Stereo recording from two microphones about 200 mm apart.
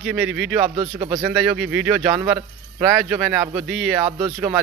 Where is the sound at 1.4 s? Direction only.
5° right (ahead or behind).